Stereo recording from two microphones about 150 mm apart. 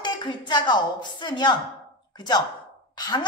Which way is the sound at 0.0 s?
30° left (ahead or behind).